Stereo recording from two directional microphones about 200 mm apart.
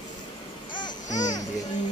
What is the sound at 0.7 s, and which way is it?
Babbling, 20° left (ahead or behind).